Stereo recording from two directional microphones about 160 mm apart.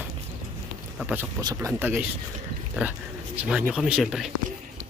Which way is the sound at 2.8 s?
5° right (ahead or behind).